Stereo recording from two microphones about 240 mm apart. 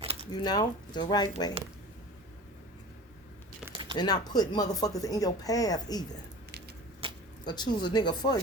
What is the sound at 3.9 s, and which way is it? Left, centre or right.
Speech, centre.